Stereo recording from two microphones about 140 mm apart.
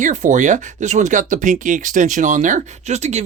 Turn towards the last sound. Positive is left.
turn(degrees=-50)  # may be behind; listen again after turning